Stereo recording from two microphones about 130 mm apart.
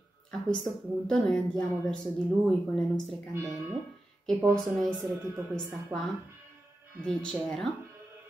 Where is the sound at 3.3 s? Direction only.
20° right (ahead or behind).